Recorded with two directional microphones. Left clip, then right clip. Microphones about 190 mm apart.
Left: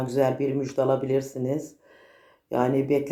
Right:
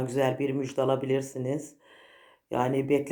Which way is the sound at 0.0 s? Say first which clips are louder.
Left 3 dB; 30° right (ahead or behind).